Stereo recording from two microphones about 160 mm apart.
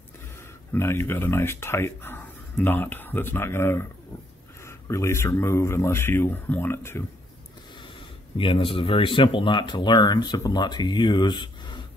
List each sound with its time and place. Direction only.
0.7 s speech: 15° left (ahead or behind)
8.4 s speech: 35° left (ahead or behind)